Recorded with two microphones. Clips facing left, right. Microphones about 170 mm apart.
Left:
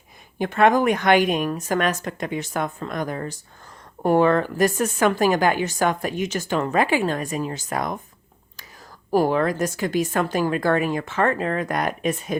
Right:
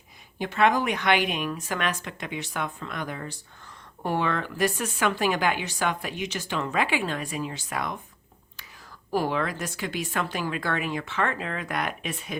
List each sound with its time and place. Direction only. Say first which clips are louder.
0.3 s a woman's voice: left 5 dB; 50° left (ahead or behind)
9.0 s a woman's voice: left 7 dB; 45° left (ahead or behind)